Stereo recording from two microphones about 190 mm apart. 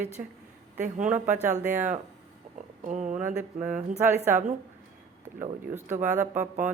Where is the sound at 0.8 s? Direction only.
40° right (ahead or behind).